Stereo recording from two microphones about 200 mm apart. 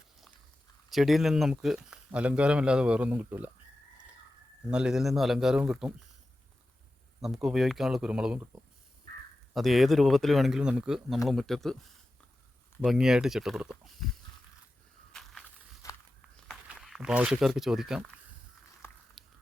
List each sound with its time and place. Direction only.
0.9 s speech: centre (ahead or behind)
4.7 s speech: 5° right (ahead or behind)
7.2 s speech: centre (ahead or behind)
12.8 s speech: centre (ahead or behind)
15.1 s crushing: centre (ahead or behind)
15.8 s walk: 15° left (ahead or behind)
16.6 s speech: centre (ahead or behind)
18.8 s a sound: 10° left (ahead or behind)